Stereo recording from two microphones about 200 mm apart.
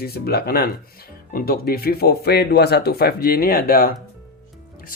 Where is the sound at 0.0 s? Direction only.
50° left (ahead or behind).